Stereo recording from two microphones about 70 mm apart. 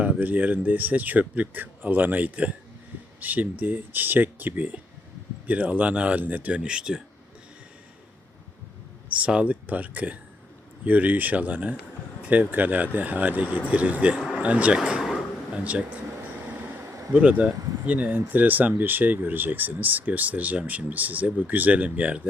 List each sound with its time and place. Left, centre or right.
0.0 s speech: right
9.1 s a man's voice: centre
14.8 s speech: centre
15.5 s speech: centre
16.3 s train: right
16.8 s a sound: right
17.1 s speech: right